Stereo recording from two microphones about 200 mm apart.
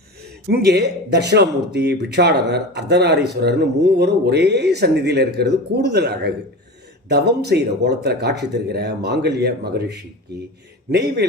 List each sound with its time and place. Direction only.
0.4 s speech: 55° right (ahead or behind)